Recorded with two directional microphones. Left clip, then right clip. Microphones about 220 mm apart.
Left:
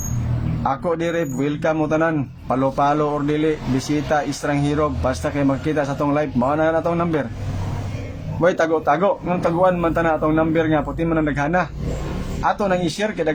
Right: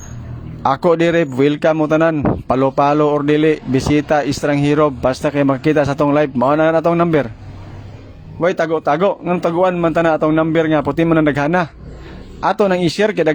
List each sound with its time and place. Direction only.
0.6 s a man's voice: 40° right (ahead or behind)
8.4 s a man's voice: 35° right (ahead or behind)